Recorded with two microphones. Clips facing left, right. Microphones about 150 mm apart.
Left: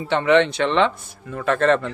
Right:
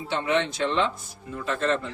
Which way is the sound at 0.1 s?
70° left (ahead or behind).